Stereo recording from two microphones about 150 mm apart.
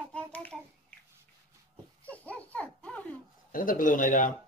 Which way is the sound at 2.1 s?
10° left (ahead or behind).